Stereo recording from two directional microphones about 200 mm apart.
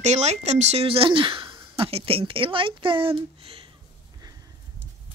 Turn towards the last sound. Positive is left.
turn(degrees=-30)  # may be behind; listen again after turning